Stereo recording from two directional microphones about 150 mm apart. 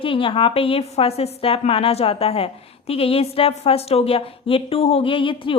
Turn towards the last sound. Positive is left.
turn(degrees=35)  # may be behind; listen again after turning